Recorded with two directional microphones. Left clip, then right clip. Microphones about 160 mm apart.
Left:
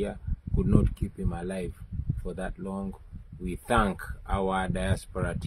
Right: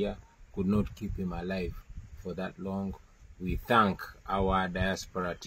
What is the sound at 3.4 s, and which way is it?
Speech, 40° left (ahead or behind).